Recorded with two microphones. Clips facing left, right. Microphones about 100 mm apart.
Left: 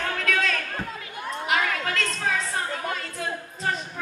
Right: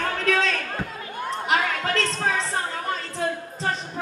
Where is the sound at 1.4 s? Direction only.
35° right (ahead or behind).